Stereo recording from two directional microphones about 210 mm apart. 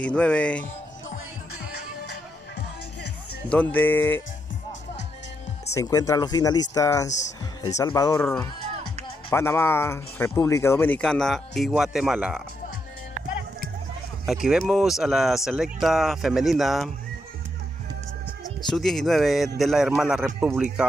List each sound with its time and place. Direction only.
0.0 s speech: 5° left (ahead or behind)
3.4 s speech: 5° left (ahead or behind)
5.8 s speech: 15° left (ahead or behind); by 12.4 s 5° right (ahead or behind)
14.2 s speech: centre (ahead or behind)
18.7 s speech: centre (ahead or behind)